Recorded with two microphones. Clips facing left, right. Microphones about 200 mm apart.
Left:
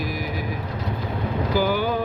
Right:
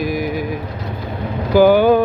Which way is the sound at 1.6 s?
60° right (ahead or behind).